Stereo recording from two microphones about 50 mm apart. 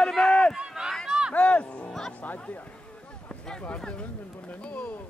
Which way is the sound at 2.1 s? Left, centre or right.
Left.